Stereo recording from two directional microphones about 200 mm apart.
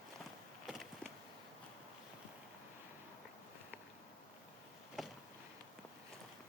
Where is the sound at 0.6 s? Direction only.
Centre (ahead or behind).